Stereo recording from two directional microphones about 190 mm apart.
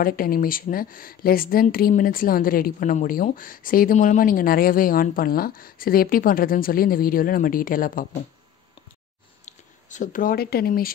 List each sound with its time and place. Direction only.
0.0 s a woman's voice: 50° left (ahead or behind)
9.5 s speech: 40° left (ahead or behind)